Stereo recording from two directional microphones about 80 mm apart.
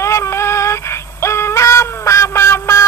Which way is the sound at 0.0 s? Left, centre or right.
Left.